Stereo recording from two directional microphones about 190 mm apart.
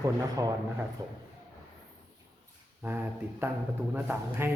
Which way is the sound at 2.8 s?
10° right (ahead or behind).